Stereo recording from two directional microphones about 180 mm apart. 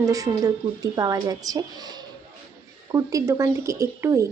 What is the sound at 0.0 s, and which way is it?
A woman's voice, 20° right (ahead or behind).